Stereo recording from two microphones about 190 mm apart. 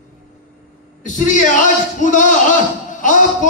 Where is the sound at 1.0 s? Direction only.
40° left (ahead or behind).